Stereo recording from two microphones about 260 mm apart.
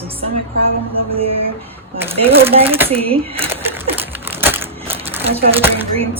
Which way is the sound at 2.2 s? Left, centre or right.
Right.